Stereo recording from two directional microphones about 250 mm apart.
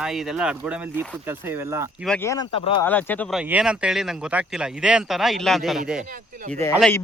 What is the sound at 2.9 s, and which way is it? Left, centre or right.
Speech, centre.